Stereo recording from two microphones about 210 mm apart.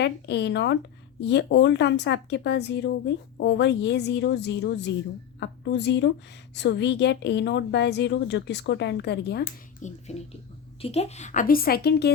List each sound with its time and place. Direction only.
0.0 s a woman's voice: 55° left (ahead or behind)
9.8 s a woman's voice: 30° left (ahead or behind); by 12.1 s 50° left (ahead or behind)